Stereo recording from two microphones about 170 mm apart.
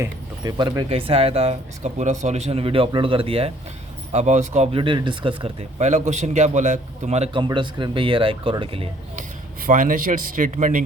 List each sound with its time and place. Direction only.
0.0 s speech: 25° right (ahead or behind)
5.8 s a man's voice: 40° right (ahead or behind)
7.4 s speech: 30° right (ahead or behind)
9.6 s a man's voice: 50° right (ahead or behind)